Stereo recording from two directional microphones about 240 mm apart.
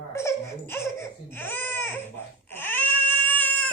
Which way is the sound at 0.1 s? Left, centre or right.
Centre.